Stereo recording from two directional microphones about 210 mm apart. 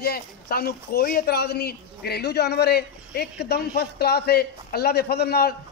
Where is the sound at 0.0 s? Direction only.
45° left (ahead or behind).